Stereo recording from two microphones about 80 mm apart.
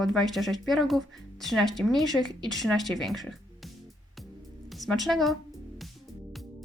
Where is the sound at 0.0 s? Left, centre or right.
Centre.